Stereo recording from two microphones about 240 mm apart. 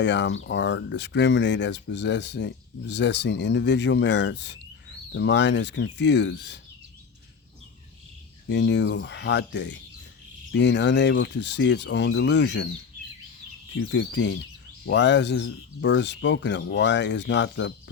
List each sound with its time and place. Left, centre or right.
0.0 s speech: left
8.4 s speech: left
13.7 s speech: left